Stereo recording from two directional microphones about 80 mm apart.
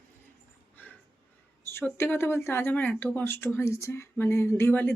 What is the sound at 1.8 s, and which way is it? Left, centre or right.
Speech, left.